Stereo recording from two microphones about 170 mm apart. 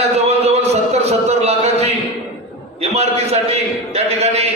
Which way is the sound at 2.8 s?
40° right (ahead or behind).